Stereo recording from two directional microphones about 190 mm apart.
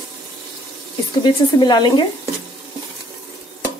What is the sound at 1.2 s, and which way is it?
Speech, 25° left (ahead or behind).